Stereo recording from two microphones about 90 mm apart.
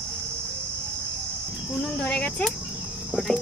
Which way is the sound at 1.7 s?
15° left (ahead or behind).